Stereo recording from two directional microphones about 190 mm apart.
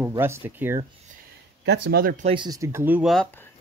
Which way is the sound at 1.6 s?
60° right (ahead or behind).